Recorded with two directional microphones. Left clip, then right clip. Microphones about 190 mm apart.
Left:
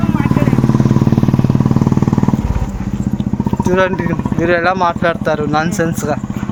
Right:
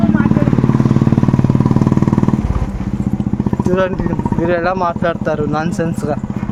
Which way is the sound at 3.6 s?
5° left (ahead or behind).